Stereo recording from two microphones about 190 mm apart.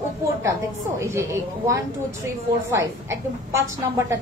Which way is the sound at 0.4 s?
15° right (ahead or behind).